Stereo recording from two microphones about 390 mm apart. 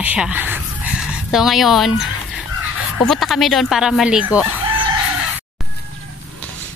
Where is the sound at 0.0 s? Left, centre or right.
Centre.